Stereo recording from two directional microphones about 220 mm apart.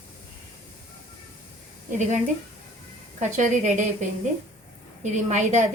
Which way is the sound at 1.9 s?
35° right (ahead or behind).